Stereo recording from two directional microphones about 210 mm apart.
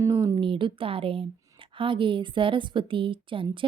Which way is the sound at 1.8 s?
25° right (ahead or behind).